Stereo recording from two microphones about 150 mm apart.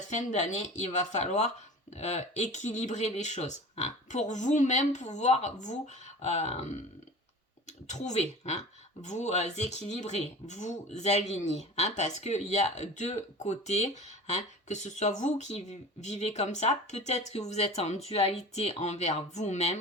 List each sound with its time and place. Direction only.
0.1 s speech: 55° left (ahead or behind)
7.9 s speech: 50° left (ahead or behind)